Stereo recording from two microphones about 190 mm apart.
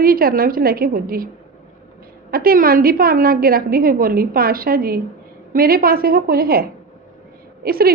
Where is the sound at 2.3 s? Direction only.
50° right (ahead or behind).